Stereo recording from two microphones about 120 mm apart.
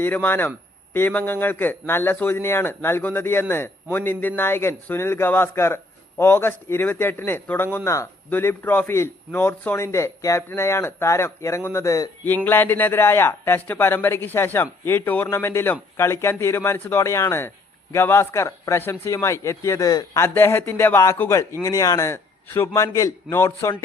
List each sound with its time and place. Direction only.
0.0 s a man's voice: 15° left (ahead or behind)
12.5 s a man's voice: 20° left (ahead or behind)
20.2 s a man's voice: 20° left (ahead or behind)